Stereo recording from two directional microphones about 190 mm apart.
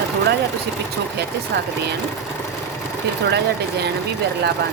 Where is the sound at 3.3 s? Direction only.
60° right (ahead or behind).